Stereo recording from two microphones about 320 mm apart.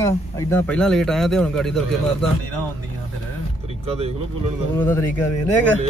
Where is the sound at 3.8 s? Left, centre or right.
Centre.